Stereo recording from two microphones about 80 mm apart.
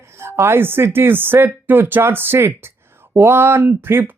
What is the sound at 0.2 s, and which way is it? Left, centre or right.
Speech, right.